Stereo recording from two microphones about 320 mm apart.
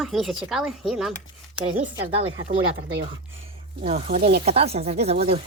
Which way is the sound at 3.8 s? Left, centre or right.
Right.